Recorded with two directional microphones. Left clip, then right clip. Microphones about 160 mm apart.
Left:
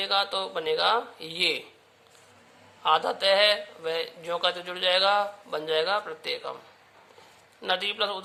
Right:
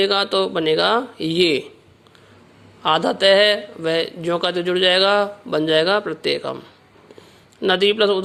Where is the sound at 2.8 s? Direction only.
20° right (ahead or behind).